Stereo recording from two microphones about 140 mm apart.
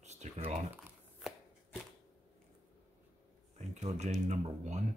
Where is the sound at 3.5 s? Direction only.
55° right (ahead or behind).